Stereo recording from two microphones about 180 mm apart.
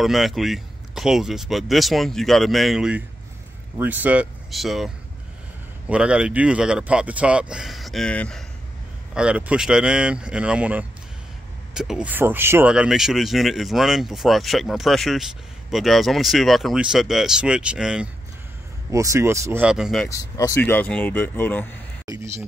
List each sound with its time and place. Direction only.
0.0 s speech: centre (ahead or behind)
9.1 s speech: 5° right (ahead or behind)
18.9 s speech: 15° right (ahead or behind)
19.6 s speech: 5° right (ahead or behind)
20.1 s speech: 20° left (ahead or behind)
22.0 s speech: 20° right (ahead or behind)